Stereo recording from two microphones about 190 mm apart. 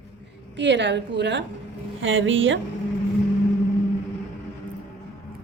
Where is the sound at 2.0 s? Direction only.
90° right.